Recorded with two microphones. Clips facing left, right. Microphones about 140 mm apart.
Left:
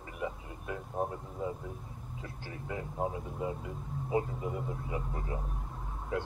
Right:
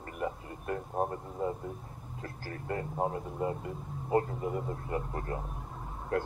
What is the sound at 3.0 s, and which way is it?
A man's voice, centre (ahead or behind).